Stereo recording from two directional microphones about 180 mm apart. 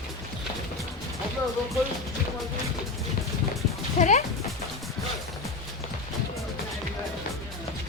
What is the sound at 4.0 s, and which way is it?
Speech, 40° left (ahead or behind).